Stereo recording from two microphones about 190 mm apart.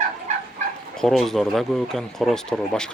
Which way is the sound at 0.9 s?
Centre (ahead or behind).